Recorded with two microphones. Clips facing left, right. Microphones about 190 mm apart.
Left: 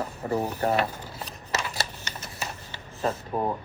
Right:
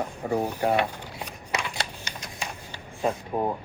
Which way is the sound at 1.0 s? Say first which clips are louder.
Right 1 dB; 35° left (ahead or behind).